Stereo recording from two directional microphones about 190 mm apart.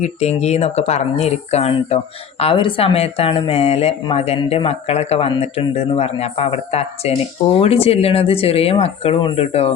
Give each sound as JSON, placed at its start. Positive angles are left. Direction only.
{"t": 0.0, "sound": "a woman's voice", "side_deg": 35}